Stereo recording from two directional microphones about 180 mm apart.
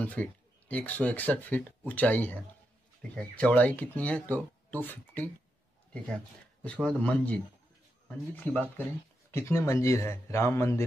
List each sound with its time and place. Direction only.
0.0 s speech: 10° left (ahead or behind)
6.6 s speech: 5° left (ahead or behind)